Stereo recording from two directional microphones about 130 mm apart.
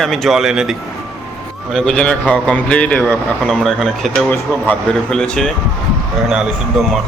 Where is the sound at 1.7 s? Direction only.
5° left (ahead or behind).